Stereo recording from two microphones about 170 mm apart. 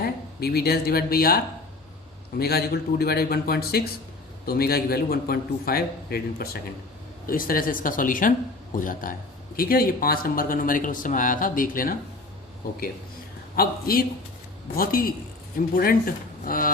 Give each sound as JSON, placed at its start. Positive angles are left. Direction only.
{"t": 0.0, "sound": "speech", "side_deg": 65}
{"t": 2.4, "sound": "speech", "side_deg": 65}
{"t": 13.6, "sound": "speech", "side_deg": 60}